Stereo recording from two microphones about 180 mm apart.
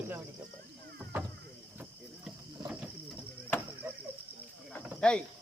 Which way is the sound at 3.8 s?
15° right (ahead or behind).